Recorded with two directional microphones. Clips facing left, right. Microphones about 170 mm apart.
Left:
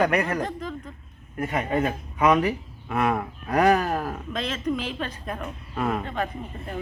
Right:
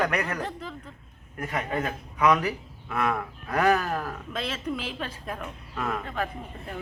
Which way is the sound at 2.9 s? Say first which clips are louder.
Left 3 dB; 15° left (ahead or behind).